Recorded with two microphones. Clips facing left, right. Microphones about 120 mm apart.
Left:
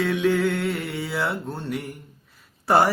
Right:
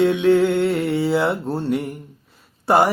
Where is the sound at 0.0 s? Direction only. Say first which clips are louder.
Right 6 dB; 25° right (ahead or behind).